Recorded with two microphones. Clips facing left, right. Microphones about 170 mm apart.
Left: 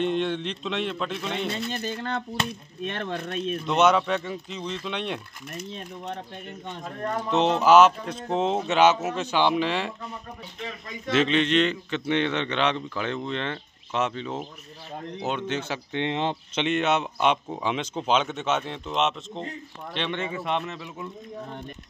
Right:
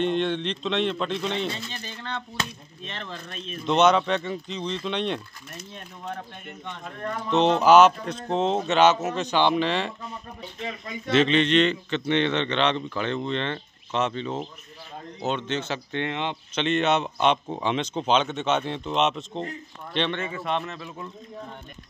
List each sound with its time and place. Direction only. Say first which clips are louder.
0.0 s speech: right 1 dB; 5° left (ahead or behind)
1.7 s speech: left 6 dB; 50° left (ahead or behind)
2.8 s speech: left 7 dB; 55° left (ahead or behind)
3.6 s speech: right 2 dB; 5° left (ahead or behind)
7.2 s speech: right 2 dB; 5° left (ahead or behind)
11.1 s speech: right 2 dB; 5° left (ahead or behind)
16.1 s speech: left 5 dB; 35° left (ahead or behind)
16.5 s speech: right 2 dB; 10° left (ahead or behind)
20.2 s speech: even; 15° left (ahead or behind)